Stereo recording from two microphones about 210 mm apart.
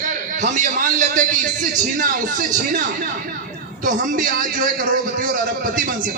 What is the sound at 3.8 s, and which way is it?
A man's voice, 40° right (ahead or behind).